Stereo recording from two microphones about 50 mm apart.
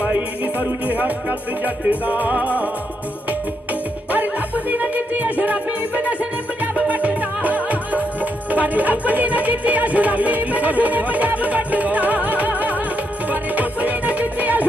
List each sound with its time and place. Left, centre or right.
0.0 s music: right
4.1 s music: right